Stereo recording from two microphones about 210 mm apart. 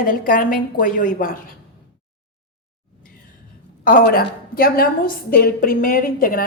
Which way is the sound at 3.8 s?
45° left (ahead or behind).